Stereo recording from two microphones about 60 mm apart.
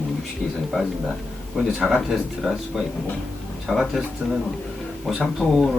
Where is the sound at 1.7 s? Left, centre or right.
Centre.